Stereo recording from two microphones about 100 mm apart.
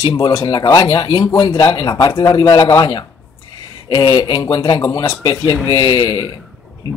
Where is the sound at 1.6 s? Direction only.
45° left (ahead or behind).